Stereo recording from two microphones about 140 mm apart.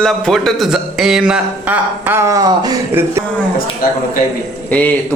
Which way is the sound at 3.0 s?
15° right (ahead or behind).